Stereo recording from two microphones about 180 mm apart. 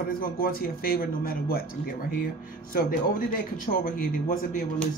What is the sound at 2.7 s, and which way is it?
Speech, 50° left (ahead or behind).